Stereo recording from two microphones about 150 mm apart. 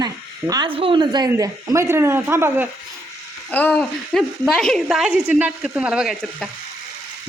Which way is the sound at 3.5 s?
10° left (ahead or behind).